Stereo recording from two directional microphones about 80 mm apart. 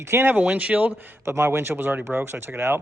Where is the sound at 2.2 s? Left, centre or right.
Right.